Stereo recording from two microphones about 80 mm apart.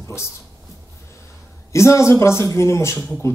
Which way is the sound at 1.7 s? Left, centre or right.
Left.